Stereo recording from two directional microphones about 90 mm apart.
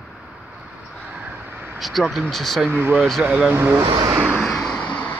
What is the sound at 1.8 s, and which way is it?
Speech, centre (ahead or behind).